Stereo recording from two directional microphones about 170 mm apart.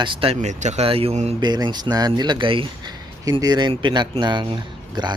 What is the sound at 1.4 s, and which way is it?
Speech, 25° right (ahead or behind).